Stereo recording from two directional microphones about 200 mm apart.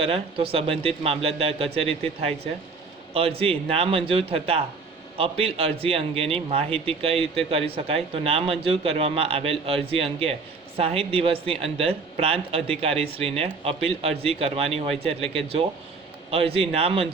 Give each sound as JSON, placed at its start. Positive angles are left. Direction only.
{"t": 0.0, "sound": "speech", "side_deg": -30}
{"t": 3.1, "sound": "speech", "side_deg": -30}